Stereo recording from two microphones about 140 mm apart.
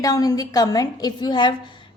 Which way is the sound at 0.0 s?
25° left (ahead or behind).